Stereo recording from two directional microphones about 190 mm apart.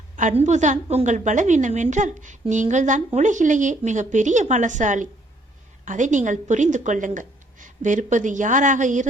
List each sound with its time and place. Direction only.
0.2 s a woman's voice: 40° right (ahead or behind)